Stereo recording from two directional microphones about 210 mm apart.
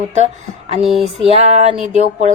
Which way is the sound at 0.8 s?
Centre (ahead or behind).